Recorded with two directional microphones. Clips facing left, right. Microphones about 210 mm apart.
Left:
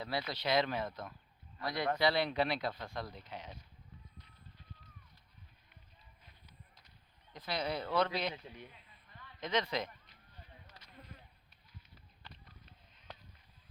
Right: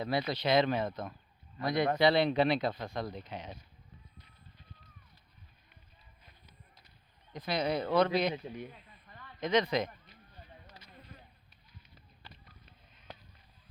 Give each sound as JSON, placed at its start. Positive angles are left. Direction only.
{"t": 0.0, "sound": "speech", "side_deg": -20}
{"t": 7.3, "sound": "speech", "side_deg": -15}
{"t": 9.4, "sound": "speech", "side_deg": -15}
{"t": 10.8, "sound": "insect", "side_deg": -5}
{"t": 12.2, "sound": "a sound", "side_deg": -5}